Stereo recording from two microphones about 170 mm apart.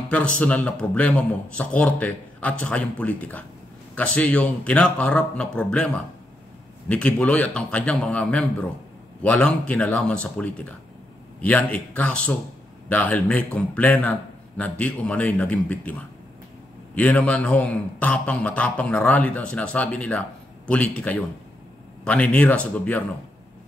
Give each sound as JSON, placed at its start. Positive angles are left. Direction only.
{"t": 0.1, "sound": "a man's voice", "side_deg": 5}
{"t": 6.9, "sound": "a man's voice", "side_deg": 5}